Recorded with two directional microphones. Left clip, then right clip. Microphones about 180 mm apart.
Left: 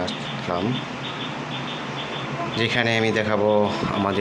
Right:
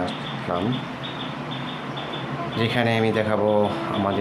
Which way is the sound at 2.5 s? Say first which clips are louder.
Left 1 dB; centre (ahead or behind).